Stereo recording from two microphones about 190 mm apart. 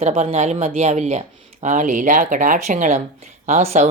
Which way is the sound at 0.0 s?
35° right (ahead or behind).